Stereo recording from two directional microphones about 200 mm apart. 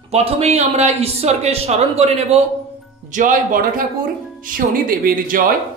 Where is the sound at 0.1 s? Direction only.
30° right (ahead or behind).